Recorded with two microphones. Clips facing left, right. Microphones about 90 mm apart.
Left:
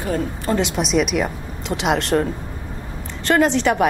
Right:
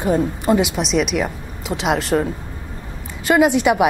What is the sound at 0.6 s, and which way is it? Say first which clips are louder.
A woman's voice: even; centre (ahead or behind).